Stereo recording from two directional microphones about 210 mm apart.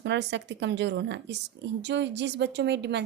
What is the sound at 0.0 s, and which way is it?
Speech, 55° right (ahead or behind).